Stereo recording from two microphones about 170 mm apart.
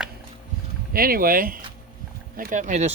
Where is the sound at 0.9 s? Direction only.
60° right (ahead or behind).